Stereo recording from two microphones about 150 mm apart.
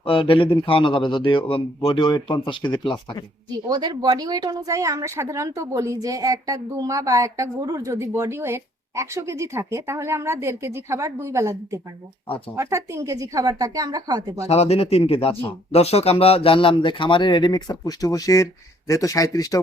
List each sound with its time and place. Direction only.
0.0 s speech: 35° left (ahead or behind)
3.7 s speech: 25° right (ahead or behind)
14.4 s speech: 45° left (ahead or behind); by 19.6 s 25° left (ahead or behind)